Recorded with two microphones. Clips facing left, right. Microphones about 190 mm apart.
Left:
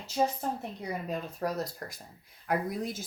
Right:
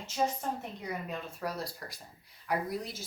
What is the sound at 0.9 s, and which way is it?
Speech, 35° left (ahead or behind).